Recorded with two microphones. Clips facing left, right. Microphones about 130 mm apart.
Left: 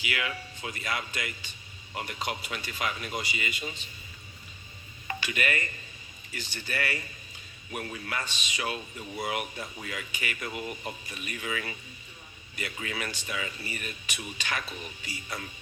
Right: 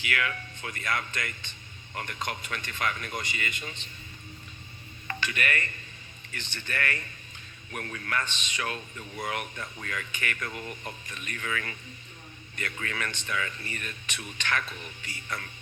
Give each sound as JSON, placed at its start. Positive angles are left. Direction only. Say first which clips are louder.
{"t": 0.0, "sound": "a man's voice", "louder": "right 2 dB", "side_deg": 15}
{"t": 5.0, "sound": "a man's voice", "louder": "even", "side_deg": 15}